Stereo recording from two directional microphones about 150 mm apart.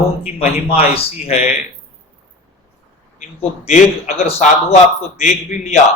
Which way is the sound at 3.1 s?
50° left (ahead or behind).